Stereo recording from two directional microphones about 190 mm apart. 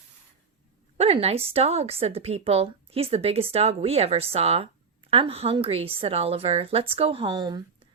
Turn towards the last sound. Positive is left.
turn(degrees=-25)  # may be behind; listen again after turning